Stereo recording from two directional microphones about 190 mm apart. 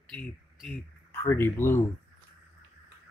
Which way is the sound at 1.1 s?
10° left (ahead or behind).